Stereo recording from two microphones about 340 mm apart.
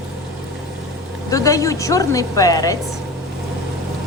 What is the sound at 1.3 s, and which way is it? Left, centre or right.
A woman's voice, centre.